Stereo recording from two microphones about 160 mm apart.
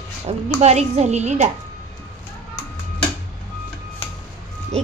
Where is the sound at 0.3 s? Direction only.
40° right (ahead or behind).